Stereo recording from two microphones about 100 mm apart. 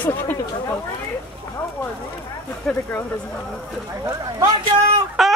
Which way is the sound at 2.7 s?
10° left (ahead or behind).